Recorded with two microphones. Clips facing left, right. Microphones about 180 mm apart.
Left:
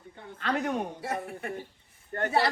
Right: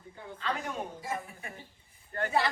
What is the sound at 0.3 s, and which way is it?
A man's voice, 65° left (ahead or behind).